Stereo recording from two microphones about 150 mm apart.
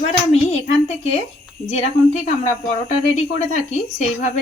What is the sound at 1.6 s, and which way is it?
Speech, 45° left (ahead or behind).